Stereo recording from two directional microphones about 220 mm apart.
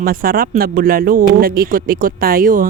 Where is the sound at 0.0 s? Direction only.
40° right (ahead or behind).